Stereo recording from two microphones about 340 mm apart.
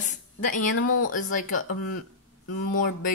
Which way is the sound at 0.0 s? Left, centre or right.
Left.